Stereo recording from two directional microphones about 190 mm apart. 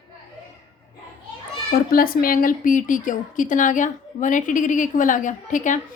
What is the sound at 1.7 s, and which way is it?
A woman's voice, 50° left (ahead or behind).